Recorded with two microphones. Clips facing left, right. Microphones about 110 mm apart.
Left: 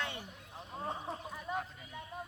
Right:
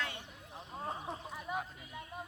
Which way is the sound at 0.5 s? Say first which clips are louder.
Left 1 dB; 5° right (ahead or behind).